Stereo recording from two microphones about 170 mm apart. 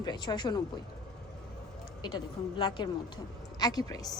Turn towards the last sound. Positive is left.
turn(degrees=20)  # may be behind; listen again after turning